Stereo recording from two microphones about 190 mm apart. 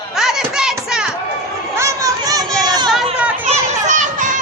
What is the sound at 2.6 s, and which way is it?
Chatter, 20° right (ahead or behind).